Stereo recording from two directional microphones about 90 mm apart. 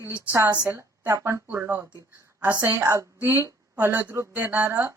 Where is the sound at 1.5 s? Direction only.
25° right (ahead or behind).